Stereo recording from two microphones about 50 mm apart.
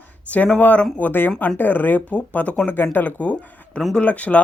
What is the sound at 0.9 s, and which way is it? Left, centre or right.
Speech, left.